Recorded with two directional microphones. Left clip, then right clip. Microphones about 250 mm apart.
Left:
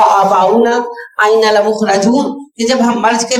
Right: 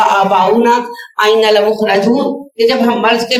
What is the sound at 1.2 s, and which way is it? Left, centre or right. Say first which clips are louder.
Speech: even; centre.